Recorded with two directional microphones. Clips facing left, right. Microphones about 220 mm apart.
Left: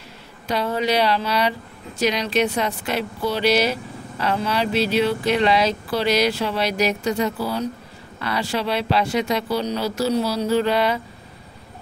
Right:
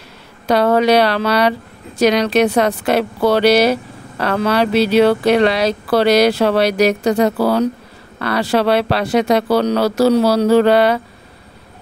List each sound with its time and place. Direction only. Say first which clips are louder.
0.5 s speech: right 9 dB; 70° right (ahead or behind)